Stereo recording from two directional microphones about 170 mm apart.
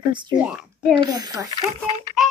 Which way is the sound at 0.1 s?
25° right (ahead or behind).